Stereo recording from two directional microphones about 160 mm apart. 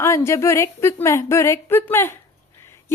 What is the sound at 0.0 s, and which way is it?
A woman's voice, 15° left (ahead or behind).